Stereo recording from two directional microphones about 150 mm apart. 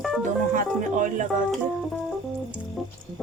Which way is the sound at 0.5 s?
60° right (ahead or behind).